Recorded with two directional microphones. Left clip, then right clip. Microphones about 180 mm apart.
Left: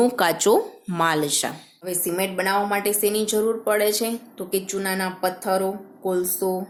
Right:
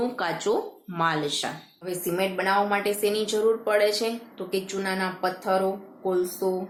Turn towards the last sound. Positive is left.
turn(degrees=40)  # may be behind; listen again after turning